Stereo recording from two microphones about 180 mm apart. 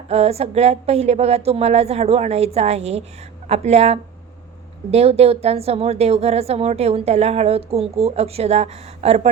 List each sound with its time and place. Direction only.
0.1 s a woman's voice: 35° right (ahead or behind)